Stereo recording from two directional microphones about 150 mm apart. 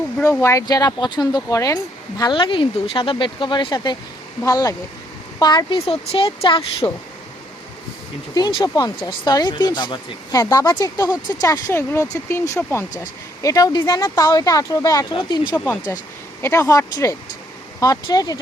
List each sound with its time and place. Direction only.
0.2 s speech: 15° left (ahead or behind)
5.8 s speech: 40° left (ahead or behind)
6.8 s speech: 20° left (ahead or behind)
8.4 s speech: 30° left (ahead or behind)
15.5 s speech: 15° left (ahead or behind)